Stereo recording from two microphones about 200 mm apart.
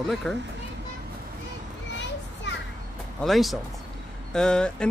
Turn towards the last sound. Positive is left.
turn(degrees=5)  # may be behind; listen again after turning